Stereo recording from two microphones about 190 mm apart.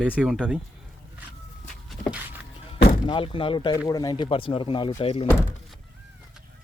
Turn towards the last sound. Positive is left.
turn(degrees=30)  # may be behind; listen again after turning